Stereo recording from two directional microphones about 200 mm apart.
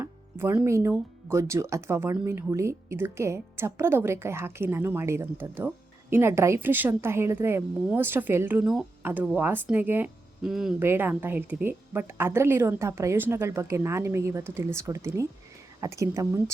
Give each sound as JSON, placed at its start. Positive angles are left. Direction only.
{"t": 0.0, "sound": "music", "side_deg": -15}
{"t": 1.3, "sound": "speech", "side_deg": -15}